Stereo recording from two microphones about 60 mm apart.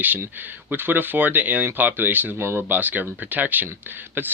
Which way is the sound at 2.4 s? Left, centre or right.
Right.